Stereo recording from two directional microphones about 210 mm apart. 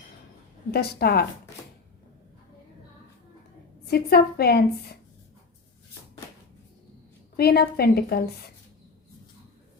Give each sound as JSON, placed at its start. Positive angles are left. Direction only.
{"t": 0.7, "sound": "a woman's voice", "side_deg": 50}
{"t": 3.8, "sound": "a woman's voice", "side_deg": 50}
{"t": 7.3, "sound": "a woman's voice", "side_deg": 45}